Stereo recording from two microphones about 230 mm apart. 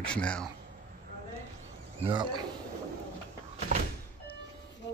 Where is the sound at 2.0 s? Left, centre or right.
Centre.